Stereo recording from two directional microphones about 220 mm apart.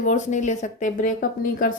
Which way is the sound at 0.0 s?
35° left (ahead or behind).